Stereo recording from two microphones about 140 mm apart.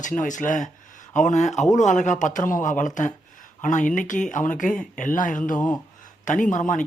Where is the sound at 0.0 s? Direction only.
65° left (ahead or behind).